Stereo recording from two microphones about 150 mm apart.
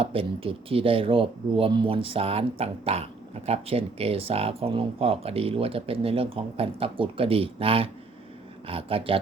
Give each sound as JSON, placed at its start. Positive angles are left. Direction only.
{"t": 0.0, "sound": "speech", "side_deg": -35}